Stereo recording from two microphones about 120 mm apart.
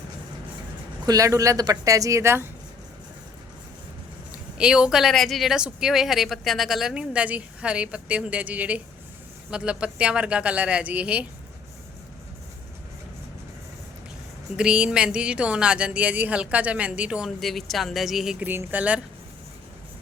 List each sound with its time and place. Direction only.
1.0 s speech: 30° right (ahead or behind)
4.3 s speech: 10° right (ahead or behind)
14.5 s speech: 5° right (ahead or behind)
18.4 s speech: 15° right (ahead or behind)